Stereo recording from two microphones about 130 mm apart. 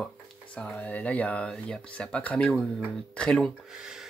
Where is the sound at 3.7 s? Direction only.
5° right (ahead or behind).